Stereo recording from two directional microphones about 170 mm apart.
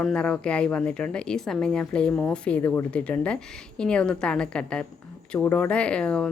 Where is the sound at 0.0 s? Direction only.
5° left (ahead or behind).